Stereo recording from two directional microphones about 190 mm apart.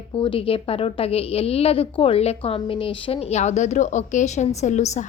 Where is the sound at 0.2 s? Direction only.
30° left (ahead or behind).